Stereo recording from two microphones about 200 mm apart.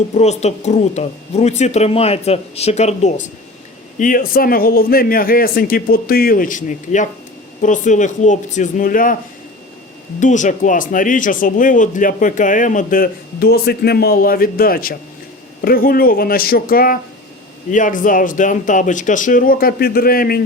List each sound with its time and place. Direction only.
0.1 s speech: 35° left (ahead or behind)
10.2 s speech: 40° left (ahead or behind)